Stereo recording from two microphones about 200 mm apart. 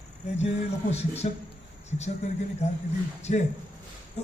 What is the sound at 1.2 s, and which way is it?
Speech, 35° left (ahead or behind).